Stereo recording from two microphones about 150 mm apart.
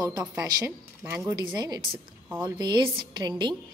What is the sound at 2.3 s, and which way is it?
Speech, 15° right (ahead or behind).